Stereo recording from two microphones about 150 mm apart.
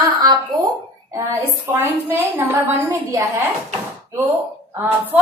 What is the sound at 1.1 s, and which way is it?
A woman's voice, 20° right (ahead or behind).